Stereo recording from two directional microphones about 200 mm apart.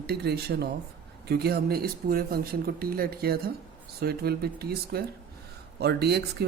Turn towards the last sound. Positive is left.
turn(degrees=-55)  # may be behind; listen again after turning